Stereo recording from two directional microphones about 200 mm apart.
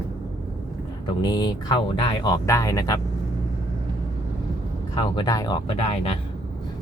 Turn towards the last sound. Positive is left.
turn(degrees=30)  # may be behind; listen again after turning